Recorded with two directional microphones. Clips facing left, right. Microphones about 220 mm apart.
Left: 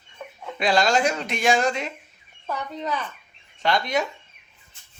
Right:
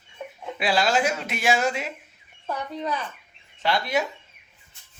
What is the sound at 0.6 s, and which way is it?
Speech, 5° right (ahead or behind).